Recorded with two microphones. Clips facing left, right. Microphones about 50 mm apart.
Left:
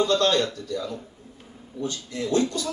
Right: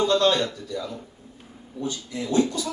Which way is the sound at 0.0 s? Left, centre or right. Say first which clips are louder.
Right 1 dB; centre.